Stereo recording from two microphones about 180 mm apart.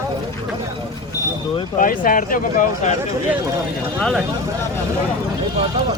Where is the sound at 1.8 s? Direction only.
50° left (ahead or behind).